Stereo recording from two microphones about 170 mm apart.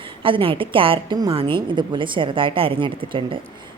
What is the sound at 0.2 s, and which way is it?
A woman's voice, 30° right (ahead or behind).